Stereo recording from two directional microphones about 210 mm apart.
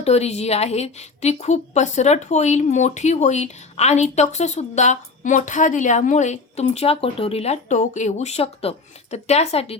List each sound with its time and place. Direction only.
0.0 s a woman's voice: 30° left (ahead or behind)